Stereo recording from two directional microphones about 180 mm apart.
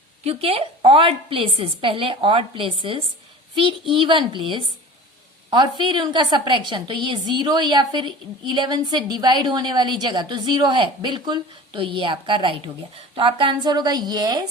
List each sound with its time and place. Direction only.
0.3 s a woman's voice: 35° right (ahead or behind)